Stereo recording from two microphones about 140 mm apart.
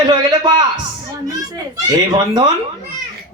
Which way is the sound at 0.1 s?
30° right (ahead or behind).